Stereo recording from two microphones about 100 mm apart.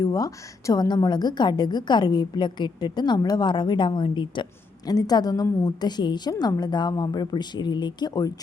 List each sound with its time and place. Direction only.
0.0 s a woman's voice: 35° left (ahead or behind); by 4.4 s 55° left (ahead or behind)
4.9 s a woman's voice: 40° left (ahead or behind)